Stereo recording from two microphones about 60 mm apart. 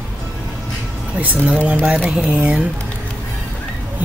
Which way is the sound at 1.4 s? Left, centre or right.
Right.